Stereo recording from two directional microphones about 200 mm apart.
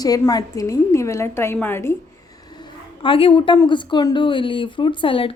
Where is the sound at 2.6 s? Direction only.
25° left (ahead or behind).